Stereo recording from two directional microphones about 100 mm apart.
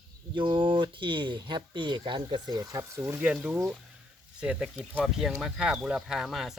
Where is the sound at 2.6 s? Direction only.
30° right (ahead or behind).